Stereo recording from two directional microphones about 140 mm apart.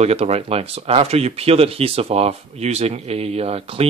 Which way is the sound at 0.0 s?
50° right (ahead or behind).